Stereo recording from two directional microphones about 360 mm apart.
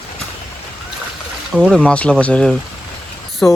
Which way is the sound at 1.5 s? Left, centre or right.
Centre.